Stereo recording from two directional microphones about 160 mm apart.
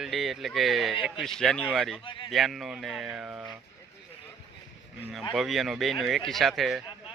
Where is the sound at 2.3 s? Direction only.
Centre (ahead or behind).